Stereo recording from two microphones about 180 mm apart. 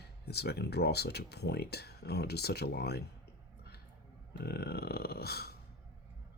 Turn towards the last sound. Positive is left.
turn(degrees=60)  # may be behind; listen again after turning